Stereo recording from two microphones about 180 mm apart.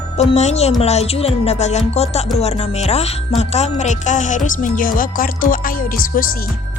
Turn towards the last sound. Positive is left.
turn(degrees=50)  # may be behind; listen again after turning